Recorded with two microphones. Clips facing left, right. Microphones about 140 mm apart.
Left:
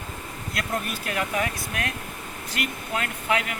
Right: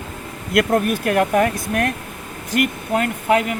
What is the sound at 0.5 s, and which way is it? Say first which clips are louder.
Speech: right 13 dB; 55° right (ahead or behind).